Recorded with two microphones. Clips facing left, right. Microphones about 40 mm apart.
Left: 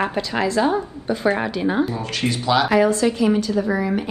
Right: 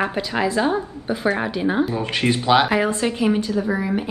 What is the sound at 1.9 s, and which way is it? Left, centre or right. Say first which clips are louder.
Speech: right 3 dB; right.